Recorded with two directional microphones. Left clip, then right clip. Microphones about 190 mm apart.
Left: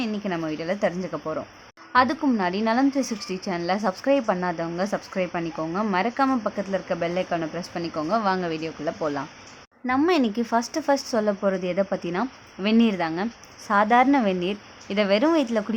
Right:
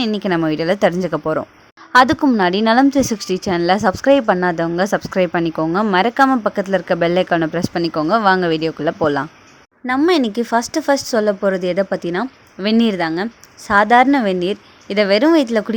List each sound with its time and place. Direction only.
0.0 s a woman's voice: 45° right (ahead or behind)
9.8 s speech: 25° right (ahead or behind)